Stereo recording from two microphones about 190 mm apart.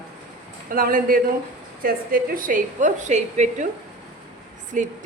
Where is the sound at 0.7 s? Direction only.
45° right (ahead or behind).